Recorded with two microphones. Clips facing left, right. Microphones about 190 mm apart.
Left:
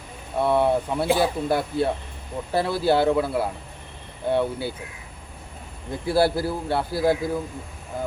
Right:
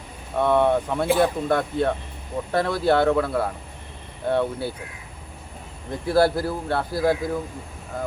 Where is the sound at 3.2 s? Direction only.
5° left (ahead or behind).